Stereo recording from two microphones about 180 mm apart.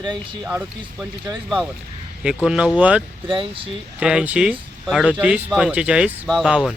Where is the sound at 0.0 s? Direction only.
25° right (ahead or behind).